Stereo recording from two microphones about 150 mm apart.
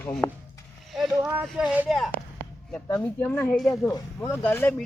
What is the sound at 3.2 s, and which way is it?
Speech, 10° left (ahead or behind).